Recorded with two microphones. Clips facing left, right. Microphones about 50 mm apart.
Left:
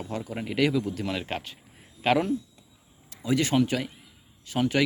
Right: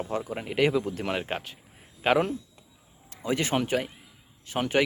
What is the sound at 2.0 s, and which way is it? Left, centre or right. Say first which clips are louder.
Speech: even; centre.